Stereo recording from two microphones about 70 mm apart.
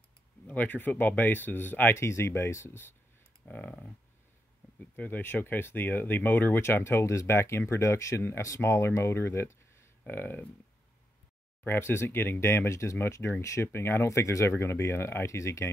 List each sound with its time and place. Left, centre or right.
0.5 s speech: left
2.0 s speech: left
3.4 s speech: left
4.7 s speech: left
10.0 s speech: left
11.6 s speech: left
13.7 s speech: left